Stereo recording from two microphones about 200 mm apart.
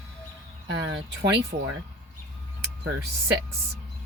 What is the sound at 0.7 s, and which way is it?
Speech, 60° right (ahead or behind).